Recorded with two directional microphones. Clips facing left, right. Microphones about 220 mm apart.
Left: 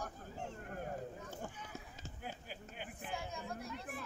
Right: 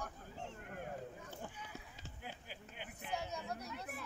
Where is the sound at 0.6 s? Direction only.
40° left (ahead or behind).